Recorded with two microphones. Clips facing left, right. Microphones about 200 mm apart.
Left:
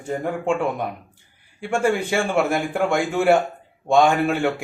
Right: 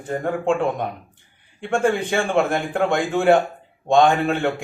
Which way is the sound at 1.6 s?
5° left (ahead or behind).